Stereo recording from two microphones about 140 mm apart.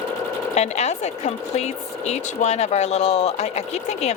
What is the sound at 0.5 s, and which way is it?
Speech, 50° left (ahead or behind).